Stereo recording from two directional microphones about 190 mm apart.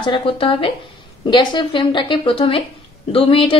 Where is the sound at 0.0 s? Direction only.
25° left (ahead or behind).